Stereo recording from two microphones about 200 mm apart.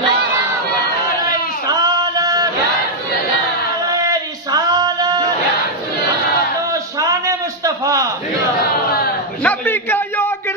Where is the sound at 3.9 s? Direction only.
20° right (ahead or behind).